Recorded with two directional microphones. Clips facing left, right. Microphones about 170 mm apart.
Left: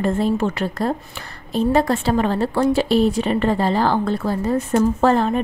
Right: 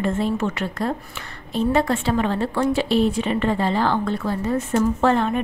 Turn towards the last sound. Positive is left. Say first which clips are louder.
# left 2 dB
turn(degrees=35)  # may be behind; listen again after turning